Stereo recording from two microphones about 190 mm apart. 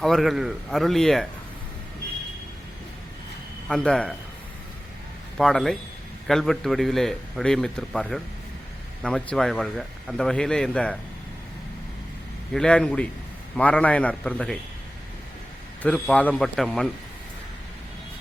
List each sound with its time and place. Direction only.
0.0 s a man's voice: centre (ahead or behind)
3.7 s a man's voice: 5° left (ahead or behind)
5.4 s a man's voice: 5° left (ahead or behind)
12.5 s a man's voice: 5° left (ahead or behind)
15.8 s a man's voice: 5° left (ahead or behind)